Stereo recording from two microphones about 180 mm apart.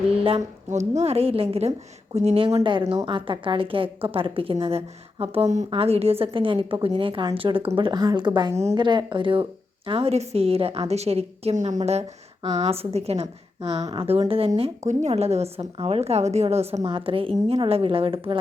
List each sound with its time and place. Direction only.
0.7 s a woman's voice: 40° right (ahead or behind)
2.6 s a woman's voice: 20° right (ahead or behind)